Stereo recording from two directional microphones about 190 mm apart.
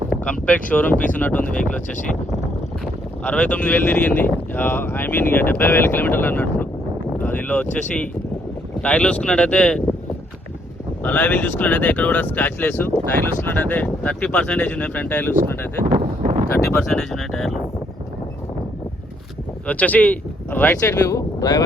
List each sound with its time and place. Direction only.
0.7 s speech: 5° left (ahead or behind)
2.8 s speech: 5° left (ahead or behind)
11.0 s speech: 10° left (ahead or behind)
15.9 s a sound: 35° right (ahead or behind)
16.5 s speech: 5° left (ahead or behind)
19.6 s speech: 10° left (ahead or behind)